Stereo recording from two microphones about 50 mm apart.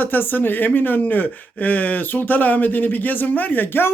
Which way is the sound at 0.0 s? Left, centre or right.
Left.